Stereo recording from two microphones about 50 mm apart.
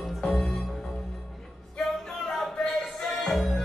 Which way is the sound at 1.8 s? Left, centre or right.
Centre.